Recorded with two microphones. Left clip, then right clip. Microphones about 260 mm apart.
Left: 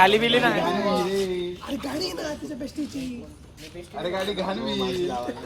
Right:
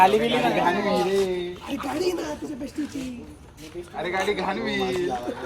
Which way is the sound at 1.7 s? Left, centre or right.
Centre.